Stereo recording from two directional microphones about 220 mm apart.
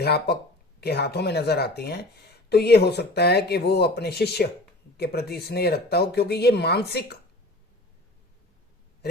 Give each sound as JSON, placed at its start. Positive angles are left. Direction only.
{"t": 0.0, "sound": "speech", "side_deg": 45}